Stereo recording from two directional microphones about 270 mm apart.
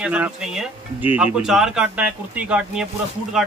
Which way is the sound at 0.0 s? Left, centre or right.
Centre.